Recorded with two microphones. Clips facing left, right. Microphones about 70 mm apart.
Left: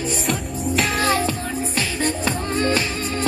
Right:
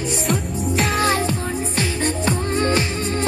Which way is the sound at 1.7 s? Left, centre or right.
Right.